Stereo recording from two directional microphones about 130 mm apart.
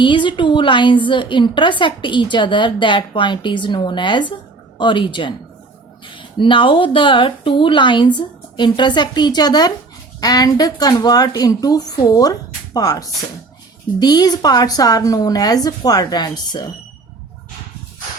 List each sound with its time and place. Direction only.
0.0 s a woman's voice: 40° left (ahead or behind)